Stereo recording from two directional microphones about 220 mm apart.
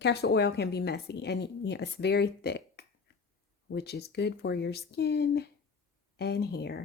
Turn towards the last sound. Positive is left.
turn(degrees=45)  # may be behind; listen again after turning